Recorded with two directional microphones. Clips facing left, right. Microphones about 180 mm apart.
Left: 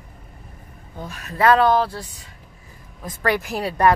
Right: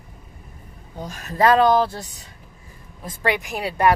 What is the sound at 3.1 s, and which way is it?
Speech, 25° right (ahead or behind).